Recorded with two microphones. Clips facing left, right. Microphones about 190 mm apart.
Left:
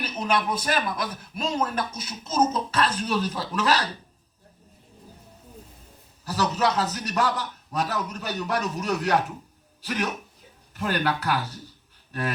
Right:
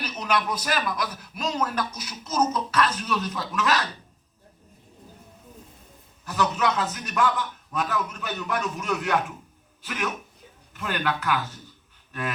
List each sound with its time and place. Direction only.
0.0 s a man's voice: 25° left (ahead or behind)
6.2 s a man's voice: 35° left (ahead or behind)